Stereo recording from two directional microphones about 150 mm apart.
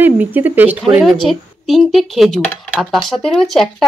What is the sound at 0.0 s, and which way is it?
Speech, 10° right (ahead or behind).